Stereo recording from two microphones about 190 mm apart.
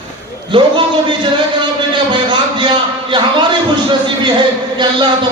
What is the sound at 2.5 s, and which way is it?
Speech, 25° right (ahead or behind).